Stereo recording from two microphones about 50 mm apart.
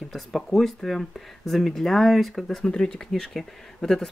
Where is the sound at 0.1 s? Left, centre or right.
Centre.